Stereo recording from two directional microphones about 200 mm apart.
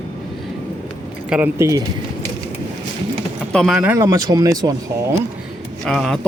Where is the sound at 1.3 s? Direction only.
10° right (ahead or behind).